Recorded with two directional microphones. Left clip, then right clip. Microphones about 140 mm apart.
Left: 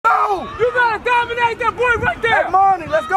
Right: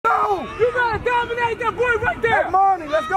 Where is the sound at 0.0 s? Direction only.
25° left (ahead or behind).